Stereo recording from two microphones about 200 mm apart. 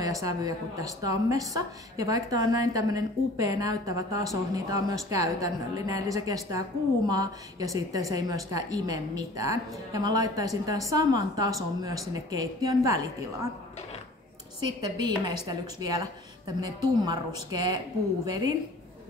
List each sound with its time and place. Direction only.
0.0 s speech: 15° right (ahead or behind)
14.6 s a woman's voice: 20° right (ahead or behind)